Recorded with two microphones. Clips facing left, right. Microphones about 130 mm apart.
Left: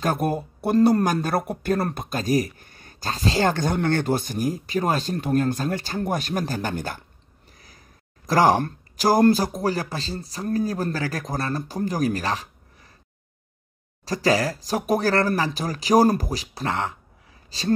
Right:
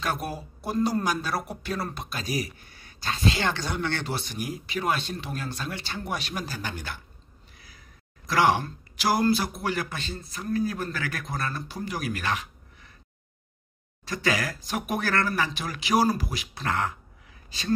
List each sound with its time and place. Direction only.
0.0 s speech: 45° left (ahead or behind); by 1.0 s 70° left (ahead or behind)
1.0 s speech: 50° left (ahead or behind)
7.5 s a sound: 45° left (ahead or behind)
8.3 s speech: 40° left (ahead or behind)
8.9 s a sound: 40° left (ahead or behind)
9.3 s speech: 40° left (ahead or behind)
14.0 s speech: 35° left (ahead or behind)
16.6 s speech: 25° left (ahead or behind)